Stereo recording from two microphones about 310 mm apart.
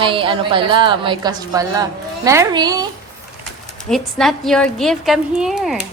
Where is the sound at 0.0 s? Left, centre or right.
Centre.